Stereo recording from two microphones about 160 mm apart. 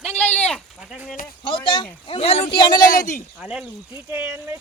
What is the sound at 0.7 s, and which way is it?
Speech, 5° right (ahead or behind).